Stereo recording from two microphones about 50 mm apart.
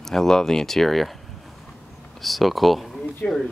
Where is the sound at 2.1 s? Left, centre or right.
Centre.